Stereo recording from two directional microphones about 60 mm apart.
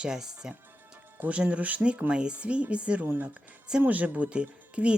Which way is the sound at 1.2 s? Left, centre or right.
Right.